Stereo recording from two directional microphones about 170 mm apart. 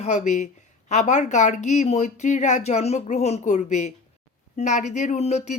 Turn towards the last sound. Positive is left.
turn(degrees=40)  # may be behind; listen again after turning